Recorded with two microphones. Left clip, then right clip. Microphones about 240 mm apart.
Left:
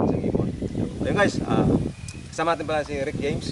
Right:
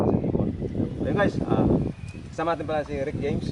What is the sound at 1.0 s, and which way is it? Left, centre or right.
Speech, centre.